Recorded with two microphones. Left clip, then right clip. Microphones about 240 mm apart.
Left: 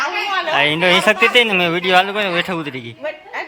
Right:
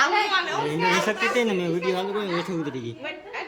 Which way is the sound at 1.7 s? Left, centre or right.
Left.